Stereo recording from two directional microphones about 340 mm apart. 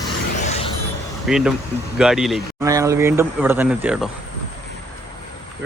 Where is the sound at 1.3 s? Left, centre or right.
Centre.